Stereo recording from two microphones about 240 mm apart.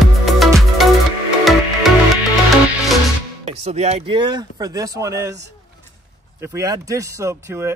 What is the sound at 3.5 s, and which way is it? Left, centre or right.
Speech, right.